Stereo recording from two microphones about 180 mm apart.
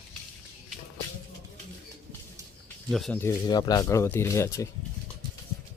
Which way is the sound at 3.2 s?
20° left (ahead or behind).